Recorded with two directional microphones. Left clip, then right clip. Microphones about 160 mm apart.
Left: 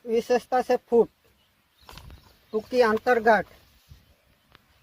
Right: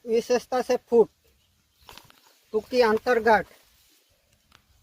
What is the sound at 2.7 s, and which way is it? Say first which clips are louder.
Speech: even; 70° right (ahead or behind).